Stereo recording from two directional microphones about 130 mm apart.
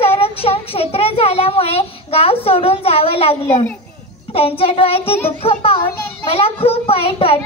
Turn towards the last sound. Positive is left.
turn(degrees=50)  # may be behind; listen again after turning